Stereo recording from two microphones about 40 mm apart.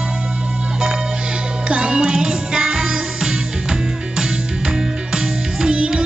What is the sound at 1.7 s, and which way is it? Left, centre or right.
Music, right.